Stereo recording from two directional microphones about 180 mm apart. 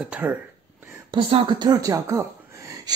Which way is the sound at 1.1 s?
30° right (ahead or behind).